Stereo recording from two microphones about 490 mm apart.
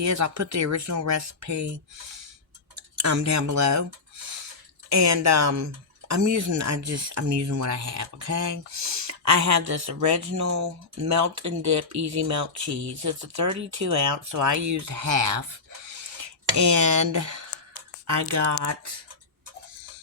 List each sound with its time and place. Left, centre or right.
0.0 s speech: right
3.0 s speech: right
4.9 s speech: right
15.9 s cutlery: right
16.6 s speech: right